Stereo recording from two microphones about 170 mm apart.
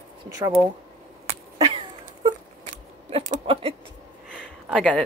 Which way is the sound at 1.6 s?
25° right (ahead or behind).